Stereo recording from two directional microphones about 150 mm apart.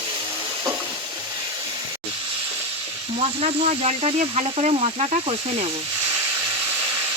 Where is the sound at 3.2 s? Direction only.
45° right (ahead or behind).